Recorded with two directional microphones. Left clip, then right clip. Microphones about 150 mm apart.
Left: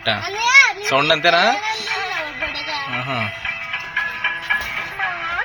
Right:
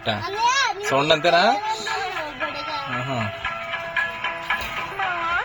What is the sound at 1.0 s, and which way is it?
Speech, 5° right (ahead or behind).